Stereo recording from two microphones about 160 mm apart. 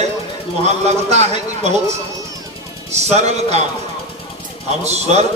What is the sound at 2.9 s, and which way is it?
Speech, 45° right (ahead or behind).